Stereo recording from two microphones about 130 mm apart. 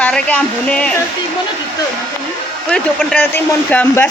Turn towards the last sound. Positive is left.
turn(degrees=15)  # may be behind; listen again after turning